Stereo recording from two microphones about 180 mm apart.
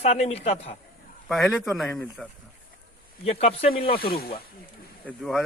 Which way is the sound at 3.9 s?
55° left (ahead or behind).